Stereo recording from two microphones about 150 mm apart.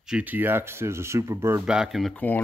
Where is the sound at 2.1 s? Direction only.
10° left (ahead or behind).